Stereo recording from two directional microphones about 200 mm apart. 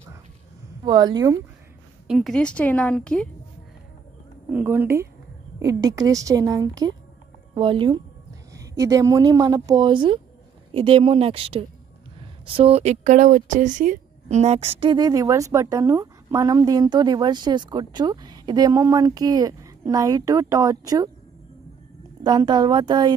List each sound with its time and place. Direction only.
0.8 s speech: 20° right (ahead or behind)
2.0 s speech: centre (ahead or behind)
4.5 s speech: 10° right (ahead or behind)
22.2 s speech: 20° right (ahead or behind)